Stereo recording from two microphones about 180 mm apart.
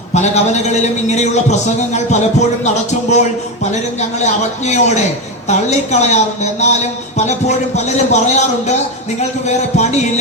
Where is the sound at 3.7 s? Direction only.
40° left (ahead or behind).